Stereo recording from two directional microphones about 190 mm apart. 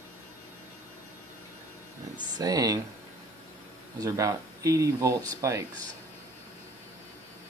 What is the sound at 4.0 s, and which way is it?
Speech, 15° right (ahead or behind).